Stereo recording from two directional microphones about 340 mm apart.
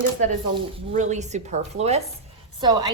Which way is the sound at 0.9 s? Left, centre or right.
Right.